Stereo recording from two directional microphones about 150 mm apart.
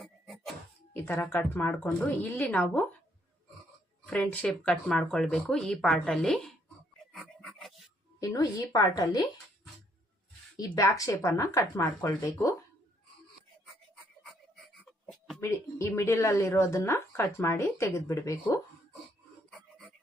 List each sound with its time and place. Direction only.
0.0 s music: centre (ahead or behind)
0.9 s a woman's voice: 15° left (ahead or behind)
4.0 s speech: 10° left (ahead or behind)
7.1 s a sound: centre (ahead or behind)
8.2 s speech: 25° left (ahead or behind)
10.6 s speech: 25° left (ahead or behind)
15.4 s speech: 20° left (ahead or behind)
19.5 s filing: 5° left (ahead or behind)